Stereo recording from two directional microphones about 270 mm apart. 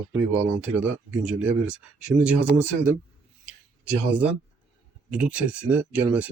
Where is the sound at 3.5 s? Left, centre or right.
Centre.